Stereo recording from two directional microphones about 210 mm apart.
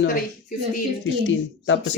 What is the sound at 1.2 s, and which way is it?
Speech, 60° left (ahead or behind).